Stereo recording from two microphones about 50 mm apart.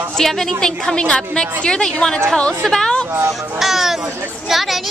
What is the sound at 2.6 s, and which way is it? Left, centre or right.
Speech, centre.